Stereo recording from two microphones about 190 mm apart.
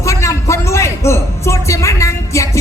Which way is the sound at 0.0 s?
15° left (ahead or behind).